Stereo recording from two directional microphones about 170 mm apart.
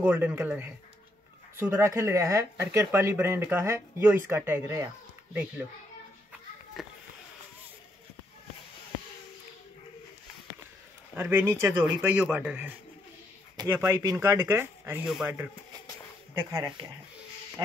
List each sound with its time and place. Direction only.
0.0 s speech: 10° right (ahead or behind)
6.8 s speech: centre (ahead or behind)
11.1 s speech: 10° right (ahead or behind)